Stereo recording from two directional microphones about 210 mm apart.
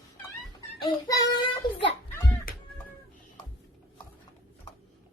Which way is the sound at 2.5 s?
45° left (ahead or behind).